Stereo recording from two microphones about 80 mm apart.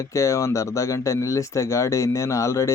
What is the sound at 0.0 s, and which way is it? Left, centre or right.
Speech, left.